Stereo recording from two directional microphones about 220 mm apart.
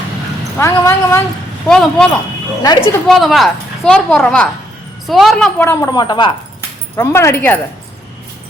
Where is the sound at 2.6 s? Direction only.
20° left (ahead or behind).